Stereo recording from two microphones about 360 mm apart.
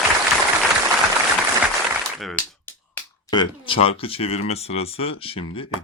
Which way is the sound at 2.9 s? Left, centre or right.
Centre.